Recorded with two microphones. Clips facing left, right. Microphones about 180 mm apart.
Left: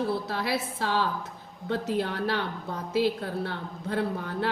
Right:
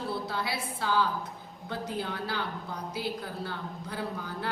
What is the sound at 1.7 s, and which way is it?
A woman's voice, 70° left (ahead or behind).